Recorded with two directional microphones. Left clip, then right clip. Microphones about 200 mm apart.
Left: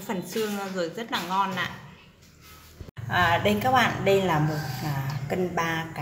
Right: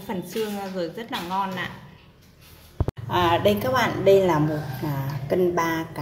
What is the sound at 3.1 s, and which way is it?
A woman's voice, 25° right (ahead or behind).